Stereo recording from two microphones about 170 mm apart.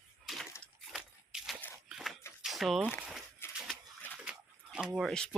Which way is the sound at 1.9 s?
Centre (ahead or behind).